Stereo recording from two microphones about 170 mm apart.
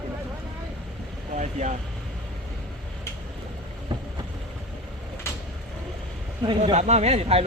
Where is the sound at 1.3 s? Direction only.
45° right (ahead or behind).